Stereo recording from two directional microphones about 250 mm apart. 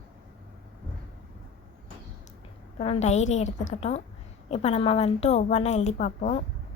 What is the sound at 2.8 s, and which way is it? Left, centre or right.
A woman's voice, left.